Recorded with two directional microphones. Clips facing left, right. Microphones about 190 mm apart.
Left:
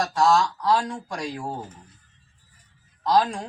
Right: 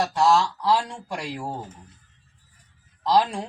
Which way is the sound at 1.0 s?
10° right (ahead or behind).